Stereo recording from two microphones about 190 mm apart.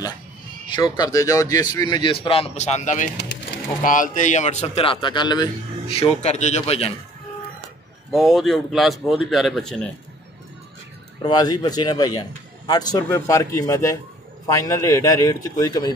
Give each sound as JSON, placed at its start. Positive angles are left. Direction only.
{"t": 0.7, "sound": "a man's voice", "side_deg": 25}
{"t": 8.1, "sound": "a man's voice", "side_deg": 0}
{"t": 11.2, "sound": "a man's voice", "side_deg": 20}